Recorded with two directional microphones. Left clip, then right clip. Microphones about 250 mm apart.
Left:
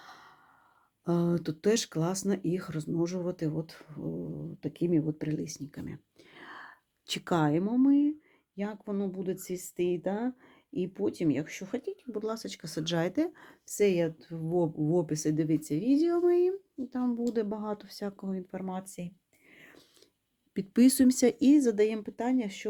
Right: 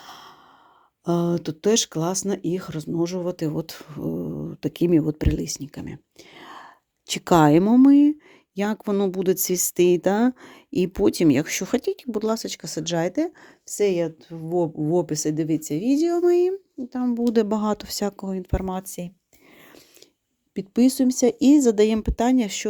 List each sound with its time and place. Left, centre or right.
0.0 s sigh: right
1.0 s speech: right
7.3 s speech: right
16.9 s speech: right
17.2 s speech: right
20.5 s speech: centre; by 22.6 s right